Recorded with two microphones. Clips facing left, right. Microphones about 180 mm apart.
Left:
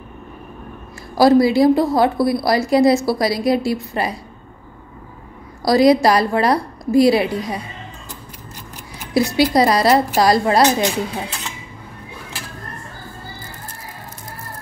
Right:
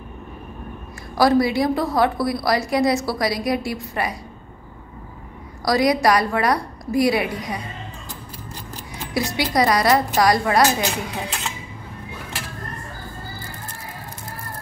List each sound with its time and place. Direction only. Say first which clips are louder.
1.1 s a woman's voice: left 5 dB; 30° left (ahead or behind)
5.7 s a woman's voice: left 5 dB; 30° left (ahead or behind)
9.1 s a woman's voice: left 6 dB; 25° left (ahead or behind)